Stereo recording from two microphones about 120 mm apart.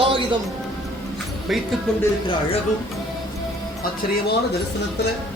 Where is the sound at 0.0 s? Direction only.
45° right (ahead or behind).